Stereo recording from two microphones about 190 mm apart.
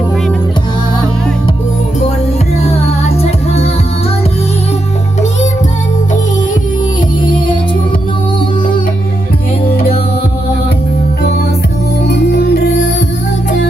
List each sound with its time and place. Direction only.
3.2 s music: 35° left (ahead or behind)
12.0 s music: 60° left (ahead or behind)